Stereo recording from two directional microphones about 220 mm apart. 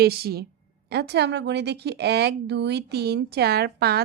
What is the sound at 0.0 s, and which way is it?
A woman's voice, 45° right (ahead or behind).